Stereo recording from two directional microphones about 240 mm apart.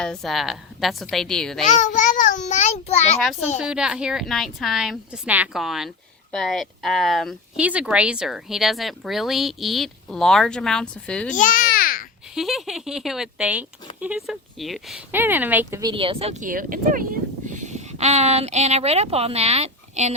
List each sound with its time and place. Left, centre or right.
0.0 s speech: centre
1.6 s a sound: left
3.6 s speech: centre
11.3 s babbling: left
12.3 s speech: centre; by 20.1 s right